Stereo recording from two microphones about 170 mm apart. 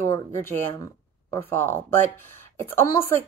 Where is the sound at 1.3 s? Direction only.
15° left (ahead or behind).